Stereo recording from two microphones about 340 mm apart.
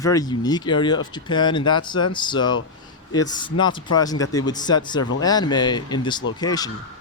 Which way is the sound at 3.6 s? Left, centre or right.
Centre.